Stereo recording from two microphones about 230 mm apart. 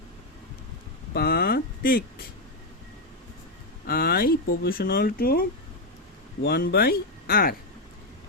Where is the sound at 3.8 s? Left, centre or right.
Left.